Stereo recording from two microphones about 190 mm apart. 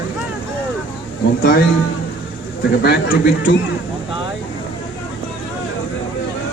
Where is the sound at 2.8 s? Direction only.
55° left (ahead or behind).